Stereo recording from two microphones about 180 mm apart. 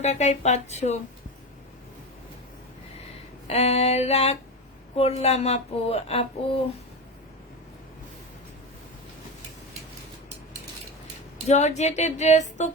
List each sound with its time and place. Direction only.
0.0 s speech: 40° left (ahead or behind)
3.4 s speech: 35° left (ahead or behind)
11.4 s speech: 40° left (ahead or behind)